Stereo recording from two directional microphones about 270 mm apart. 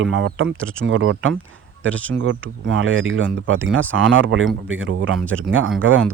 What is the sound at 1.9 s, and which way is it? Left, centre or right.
Speech, centre.